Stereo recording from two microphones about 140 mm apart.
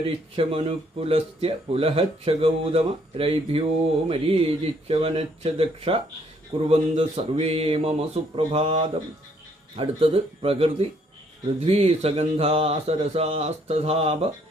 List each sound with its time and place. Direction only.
0.0 s speech: 40° right (ahead or behind)